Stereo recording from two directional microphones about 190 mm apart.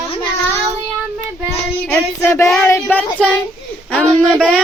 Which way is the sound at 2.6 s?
10° left (ahead or behind).